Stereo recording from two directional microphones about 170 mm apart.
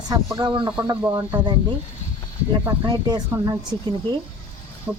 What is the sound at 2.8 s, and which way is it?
Speech, 25° right (ahead or behind).